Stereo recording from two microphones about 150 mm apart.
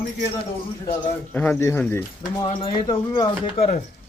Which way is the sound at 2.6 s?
35° left (ahead or behind).